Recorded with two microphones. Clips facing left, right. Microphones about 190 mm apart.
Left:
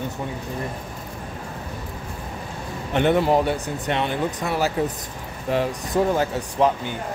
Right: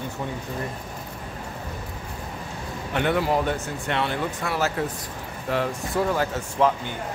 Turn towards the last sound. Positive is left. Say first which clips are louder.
# left 2 dB
turn(degrees=20)  # may be behind; listen again after turning